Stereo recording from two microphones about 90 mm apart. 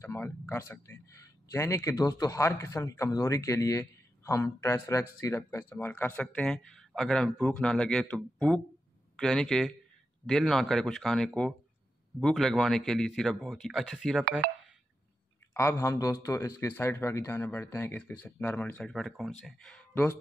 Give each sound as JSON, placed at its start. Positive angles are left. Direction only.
{"t": 0.2, "sound": "speech", "side_deg": 25}
{"t": 15.5, "sound": "a man's voice", "side_deg": 30}
{"t": 19.1, "sound": "speech", "side_deg": 0}
{"t": 19.6, "sound": "speech", "side_deg": 10}